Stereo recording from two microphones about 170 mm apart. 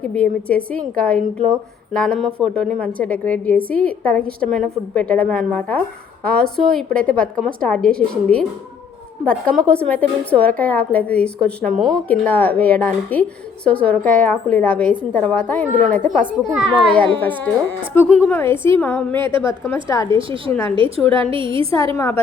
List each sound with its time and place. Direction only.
0.0 s a woman's voice: 5° left (ahead or behind)
19.1 s a woman's voice: 30° right (ahead or behind)
19.4 s a woman's voice: 15° left (ahead or behind)
20.1 s a woman's voice: 30° right (ahead or behind)
21.9 s a woman's voice: 15° left (ahead or behind)